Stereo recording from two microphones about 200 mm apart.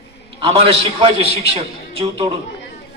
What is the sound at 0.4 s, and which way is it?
Speech, 25° right (ahead or behind).